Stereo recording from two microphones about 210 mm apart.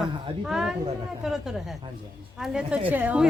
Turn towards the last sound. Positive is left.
turn(degrees=-5)  # may be behind; listen again after turning